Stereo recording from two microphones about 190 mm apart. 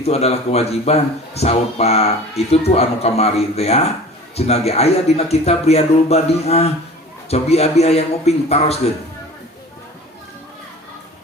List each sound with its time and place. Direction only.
0.0 s a man's voice: 35° left (ahead or behind)